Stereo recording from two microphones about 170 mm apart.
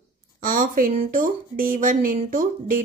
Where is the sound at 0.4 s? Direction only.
55° right (ahead or behind).